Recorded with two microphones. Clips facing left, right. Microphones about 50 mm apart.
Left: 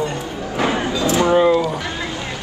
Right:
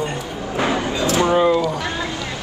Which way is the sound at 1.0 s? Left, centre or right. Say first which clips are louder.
Left 1 dB; left.